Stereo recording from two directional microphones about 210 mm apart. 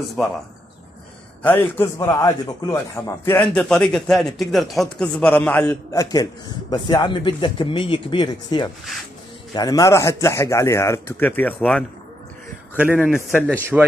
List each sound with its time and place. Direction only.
1.8 s a man's voice: 10° left (ahead or behind)
3.3 s a man's voice: 5° left (ahead or behind)
12.7 s a man's voice: 10° right (ahead or behind)